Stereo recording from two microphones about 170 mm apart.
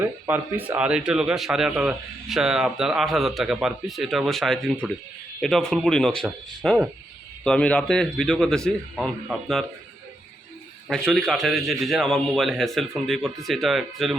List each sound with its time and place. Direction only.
0.0 s speech: 10° right (ahead or behind)
10.8 s speech: centre (ahead or behind)